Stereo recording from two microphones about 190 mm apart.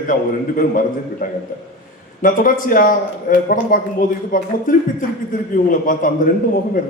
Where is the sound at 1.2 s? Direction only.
45° left (ahead or behind).